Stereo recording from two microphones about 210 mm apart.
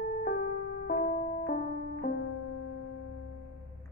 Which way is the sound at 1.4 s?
45° left (ahead or behind).